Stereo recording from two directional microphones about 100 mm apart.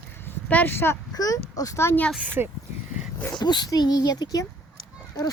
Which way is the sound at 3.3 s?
45° left (ahead or behind).